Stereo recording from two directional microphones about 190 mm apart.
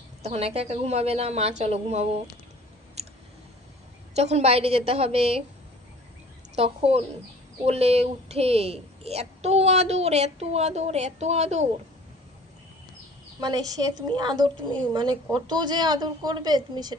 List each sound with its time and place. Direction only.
0.2 s a woman's voice: 35° right (ahead or behind)
3.0 s clicking: 35° right (ahead or behind)
4.1 s a woman's voice: 35° right (ahead or behind)
6.5 s a woman's voice: 30° right (ahead or behind)
13.4 s a woman's voice: 20° right (ahead or behind)